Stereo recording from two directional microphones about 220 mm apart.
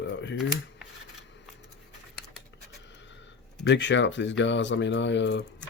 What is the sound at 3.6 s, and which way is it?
Speech, 55° left (ahead or behind).